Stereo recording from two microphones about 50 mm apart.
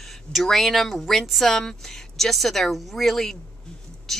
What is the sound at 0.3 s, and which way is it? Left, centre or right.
Speech, centre.